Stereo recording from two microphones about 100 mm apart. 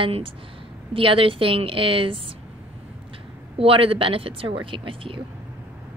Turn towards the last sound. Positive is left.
turn(degrees=-65)  # may be behind; listen again after turning